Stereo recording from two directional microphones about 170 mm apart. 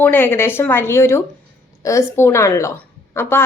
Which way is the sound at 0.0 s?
10° left (ahead or behind).